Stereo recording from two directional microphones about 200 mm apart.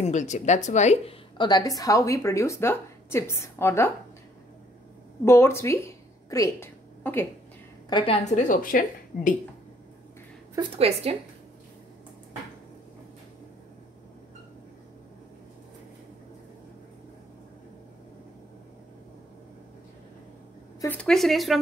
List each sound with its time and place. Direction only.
0.0 s a woman's voice: 35° left (ahead or behind)
1.4 s a woman's voice: 20° left (ahead or behind)
5.2 s a woman's voice: 10° left (ahead or behind)
7.9 s a woman's voice: 30° left (ahead or behind); by 9.3 s 45° left (ahead or behind)
20.8 s a woman's voice: 5° left (ahead or behind)